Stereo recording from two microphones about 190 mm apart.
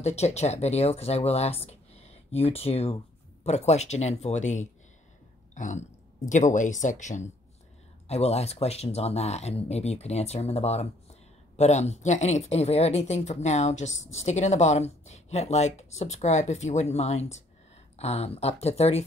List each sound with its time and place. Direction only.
0.0 s speech: 35° left (ahead or behind)